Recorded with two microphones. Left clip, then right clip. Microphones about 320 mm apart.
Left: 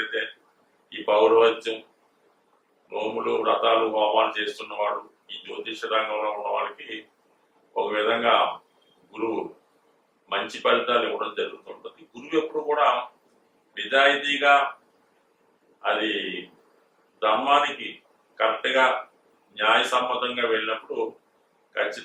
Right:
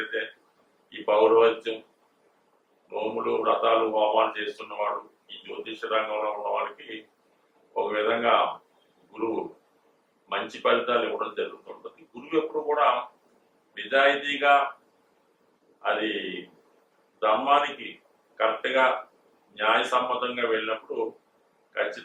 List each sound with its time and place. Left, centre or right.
0.0 s a man's voice: centre
2.9 s speech: centre
10.6 s speech: centre
15.9 s speech: centre
20.9 s speech: right